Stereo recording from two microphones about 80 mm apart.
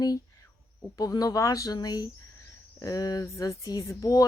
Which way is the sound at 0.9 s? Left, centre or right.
Left.